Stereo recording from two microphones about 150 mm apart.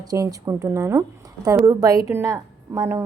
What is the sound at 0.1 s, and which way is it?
A woman's voice, 25° right (ahead or behind).